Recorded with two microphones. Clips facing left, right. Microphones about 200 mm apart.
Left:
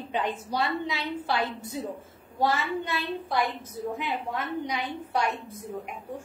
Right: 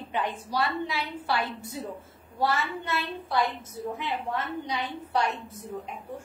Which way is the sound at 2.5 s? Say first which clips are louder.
Left 1 dB; 15° left (ahead or behind).